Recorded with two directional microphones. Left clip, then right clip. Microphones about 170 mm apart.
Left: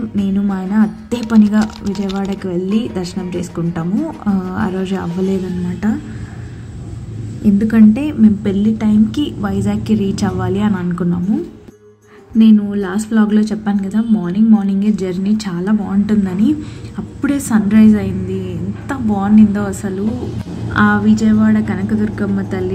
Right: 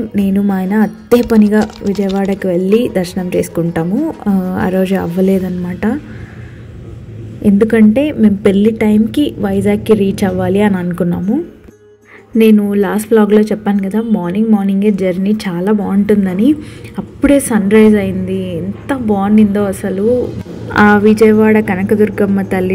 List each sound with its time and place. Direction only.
0.1 s a woman's voice: 15° right (ahead or behind)
1.2 s speech: centre (ahead or behind)
2.4 s a woman's voice: 15° right (ahead or behind)
7.4 s a woman's voice: 20° right (ahead or behind)
12.4 s a woman's voice: 20° right (ahead or behind)
20.7 s a woman's voice: 20° right (ahead or behind)